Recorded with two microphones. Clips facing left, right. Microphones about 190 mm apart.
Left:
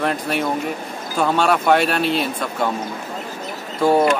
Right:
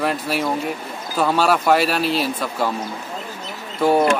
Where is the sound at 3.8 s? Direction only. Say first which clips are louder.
Left 1 dB; centre (ahead or behind).